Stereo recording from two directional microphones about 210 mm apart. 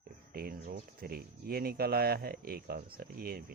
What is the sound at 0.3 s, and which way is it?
Speech, 45° right (ahead or behind).